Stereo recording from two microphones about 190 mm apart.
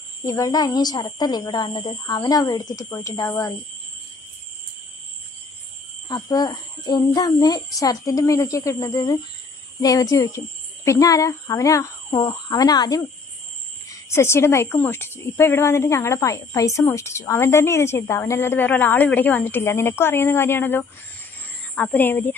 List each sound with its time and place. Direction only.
0.3 s speech: 20° left (ahead or behind)
6.1 s speech: 20° left (ahead or behind)